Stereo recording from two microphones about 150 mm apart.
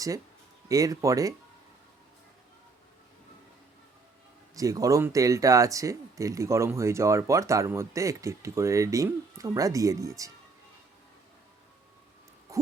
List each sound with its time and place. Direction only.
0.7 s speech: 20° right (ahead or behind)
4.5 s speech: 25° right (ahead or behind)